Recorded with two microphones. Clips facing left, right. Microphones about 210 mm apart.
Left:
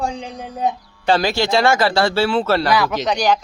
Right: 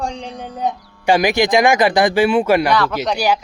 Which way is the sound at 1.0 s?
15° right (ahead or behind).